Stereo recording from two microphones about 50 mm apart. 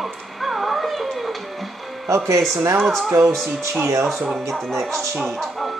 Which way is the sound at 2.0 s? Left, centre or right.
Right.